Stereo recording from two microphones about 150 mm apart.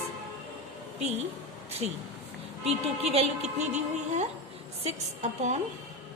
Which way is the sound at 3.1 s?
50° right (ahead or behind).